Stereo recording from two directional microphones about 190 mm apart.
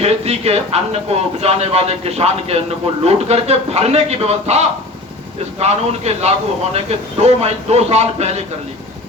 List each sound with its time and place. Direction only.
0.0 s a man's voice: 35° right (ahead or behind)